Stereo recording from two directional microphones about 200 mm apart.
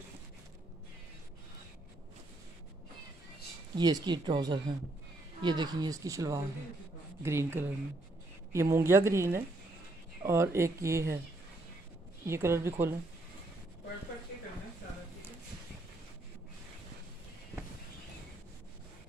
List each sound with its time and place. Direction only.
3.7 s speech: 20° right (ahead or behind)
12.3 s speech: 15° right (ahead or behind)